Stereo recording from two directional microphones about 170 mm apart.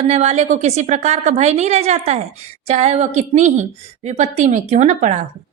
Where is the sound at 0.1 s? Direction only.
40° right (ahead or behind).